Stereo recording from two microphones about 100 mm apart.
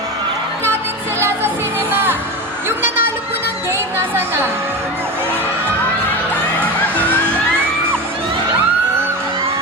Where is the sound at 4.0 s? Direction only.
20° right (ahead or behind).